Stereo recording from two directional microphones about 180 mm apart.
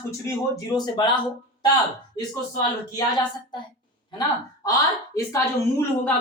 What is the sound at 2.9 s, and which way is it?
Speech, 25° left (ahead or behind).